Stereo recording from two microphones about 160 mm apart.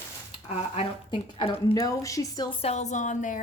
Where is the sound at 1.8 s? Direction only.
20° left (ahead or behind).